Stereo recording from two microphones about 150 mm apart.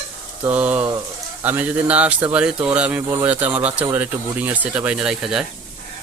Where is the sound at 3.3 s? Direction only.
10° right (ahead or behind).